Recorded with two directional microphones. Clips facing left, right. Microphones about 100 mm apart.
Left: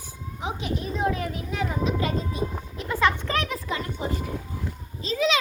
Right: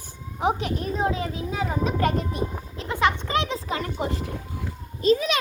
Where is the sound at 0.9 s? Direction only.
25° right (ahead or behind).